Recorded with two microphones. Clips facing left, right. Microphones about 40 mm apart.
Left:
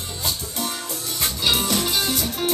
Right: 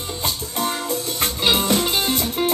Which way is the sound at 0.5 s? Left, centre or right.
Right.